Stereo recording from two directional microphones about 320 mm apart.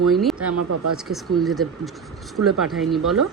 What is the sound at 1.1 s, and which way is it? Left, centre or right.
Speech, centre.